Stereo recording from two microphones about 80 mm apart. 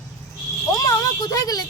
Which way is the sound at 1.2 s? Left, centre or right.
Left.